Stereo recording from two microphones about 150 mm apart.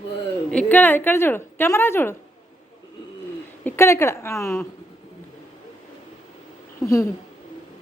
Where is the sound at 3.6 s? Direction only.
15° left (ahead or behind).